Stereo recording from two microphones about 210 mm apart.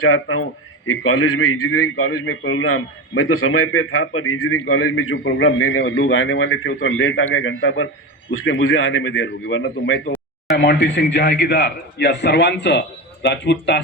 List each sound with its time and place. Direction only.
0.0 s a man's voice: 80° left; by 10.0 s 65° left (ahead or behind)
10.6 s a man's voice: 55° left (ahead or behind)